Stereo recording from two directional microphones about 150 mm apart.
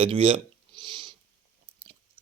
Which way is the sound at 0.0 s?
35° right (ahead or behind).